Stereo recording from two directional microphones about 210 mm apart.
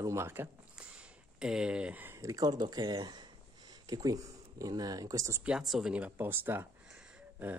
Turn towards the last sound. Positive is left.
turn(degrees=-5)  # may be behind; listen again after turning